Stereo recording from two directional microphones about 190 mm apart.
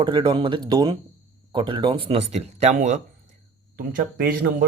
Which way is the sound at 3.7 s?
50° right (ahead or behind).